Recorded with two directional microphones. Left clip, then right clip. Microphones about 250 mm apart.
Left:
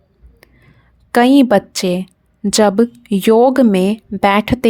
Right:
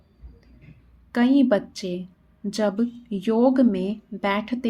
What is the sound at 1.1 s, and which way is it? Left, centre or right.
A woman's voice, left.